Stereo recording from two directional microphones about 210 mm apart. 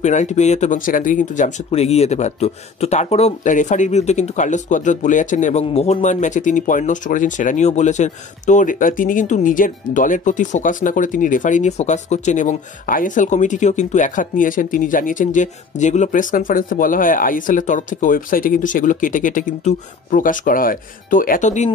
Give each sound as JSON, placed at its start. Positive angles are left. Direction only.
{"t": 0.0, "sound": "speech", "side_deg": 35}